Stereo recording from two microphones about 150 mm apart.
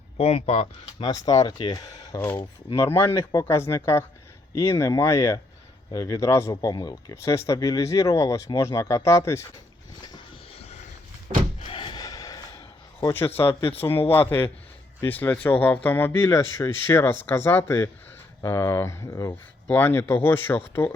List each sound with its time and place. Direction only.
0.2 s speech: 45° left (ahead or behind)
1.0 s speech: 25° left (ahead or behind)
11.6 s gasp: 35° left (ahead or behind); by 13.6 s 15° left (ahead or behind)
13.7 s speech: 15° left (ahead or behind)
15.0 s speech: 15° left (ahead or behind)